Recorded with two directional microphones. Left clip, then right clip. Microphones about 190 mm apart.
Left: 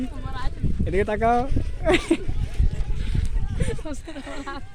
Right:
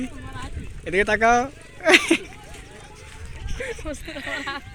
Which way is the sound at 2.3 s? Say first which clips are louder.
Left 2 dB; 55° left (ahead or behind).